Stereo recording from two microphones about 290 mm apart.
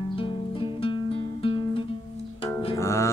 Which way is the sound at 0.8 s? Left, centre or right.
Centre.